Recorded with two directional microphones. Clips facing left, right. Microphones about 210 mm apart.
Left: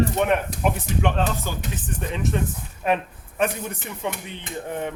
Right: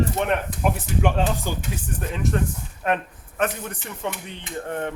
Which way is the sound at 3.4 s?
10° left (ahead or behind).